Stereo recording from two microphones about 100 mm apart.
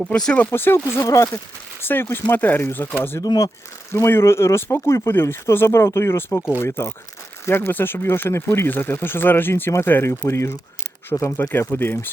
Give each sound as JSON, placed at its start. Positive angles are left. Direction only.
{"t": 0.1, "sound": "speech", "side_deg": 10}
{"t": 0.5, "sound": "speech", "side_deg": 20}
{"t": 3.2, "sound": "speech", "side_deg": 40}
{"t": 3.9, "sound": "speech", "side_deg": 25}